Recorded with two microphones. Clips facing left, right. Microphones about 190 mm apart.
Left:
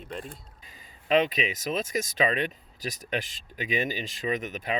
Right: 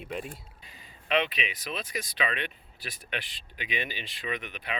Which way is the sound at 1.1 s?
40° left (ahead or behind).